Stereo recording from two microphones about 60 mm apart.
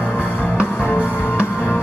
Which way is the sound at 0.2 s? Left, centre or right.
Left.